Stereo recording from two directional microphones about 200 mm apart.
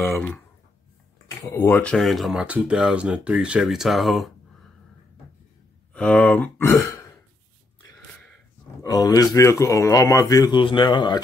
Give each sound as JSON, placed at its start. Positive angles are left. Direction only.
{"t": 0.0, "sound": "a sound", "side_deg": 10}
{"t": 1.5, "sound": "speech", "side_deg": 15}
{"t": 5.9, "sound": "speech", "side_deg": 5}
{"t": 8.8, "sound": "speech", "side_deg": 20}